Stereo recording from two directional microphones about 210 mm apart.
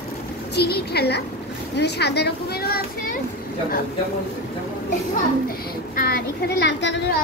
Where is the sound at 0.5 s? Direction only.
50° left (ahead or behind).